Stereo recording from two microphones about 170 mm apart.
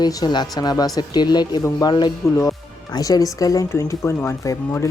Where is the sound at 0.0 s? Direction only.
25° left (ahead or behind).